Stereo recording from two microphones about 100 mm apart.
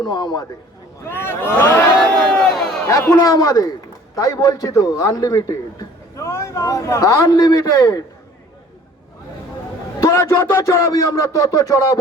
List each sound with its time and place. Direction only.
0.0 s a man's voice: 45° left (ahead or behind)
1.0 s speech: 25° left (ahead or behind)
2.0 s crowd: 10° left (ahead or behind)
2.8 s a man's voice: 25° left (ahead or behind)
10.0 s a man's voice: 30° left (ahead or behind)